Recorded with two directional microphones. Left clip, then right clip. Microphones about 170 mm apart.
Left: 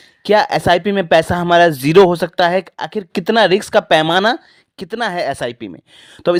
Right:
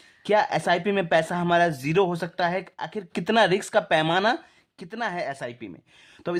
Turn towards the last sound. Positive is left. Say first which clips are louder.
# left 15 dB
turn(degrees=50)  # may be behind; listen again after turning